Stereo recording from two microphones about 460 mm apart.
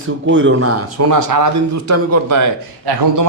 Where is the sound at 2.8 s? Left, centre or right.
Right.